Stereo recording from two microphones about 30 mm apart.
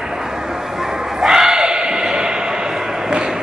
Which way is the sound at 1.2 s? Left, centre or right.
Centre.